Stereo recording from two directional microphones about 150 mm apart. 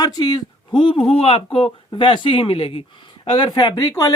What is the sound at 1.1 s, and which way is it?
Speech, 40° left (ahead or behind).